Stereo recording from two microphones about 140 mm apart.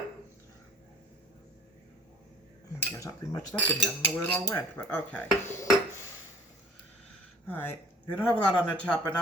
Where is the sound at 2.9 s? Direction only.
25° left (ahead or behind).